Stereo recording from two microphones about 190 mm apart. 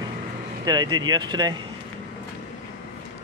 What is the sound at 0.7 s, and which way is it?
Speech, 20° right (ahead or behind).